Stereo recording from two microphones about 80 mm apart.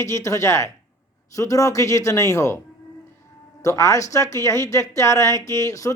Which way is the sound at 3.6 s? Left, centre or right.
Left.